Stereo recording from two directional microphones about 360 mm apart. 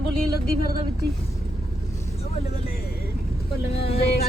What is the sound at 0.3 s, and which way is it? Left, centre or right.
Speech, left.